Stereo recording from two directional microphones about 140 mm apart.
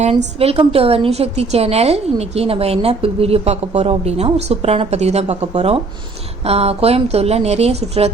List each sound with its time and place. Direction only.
0.0 s a woman's voice: 45° right (ahead or behind)